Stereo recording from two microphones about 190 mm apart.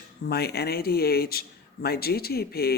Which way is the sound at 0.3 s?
55° left (ahead or behind).